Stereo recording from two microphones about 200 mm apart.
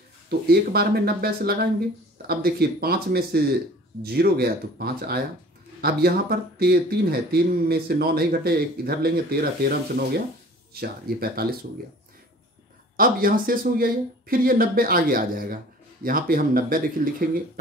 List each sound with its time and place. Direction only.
0.3 s speech: 50° right (ahead or behind)
12.9 s speech: 45° right (ahead or behind)